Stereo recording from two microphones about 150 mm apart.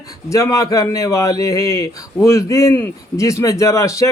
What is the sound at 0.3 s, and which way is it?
A man's voice, 20° left (ahead or behind).